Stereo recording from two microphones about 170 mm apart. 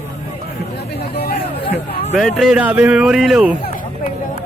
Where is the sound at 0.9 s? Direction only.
65° left (ahead or behind).